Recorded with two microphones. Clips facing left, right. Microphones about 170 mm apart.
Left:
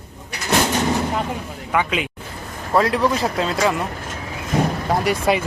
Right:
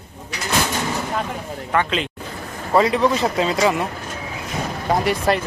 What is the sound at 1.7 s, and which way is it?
A man's voice, 5° left (ahead or behind).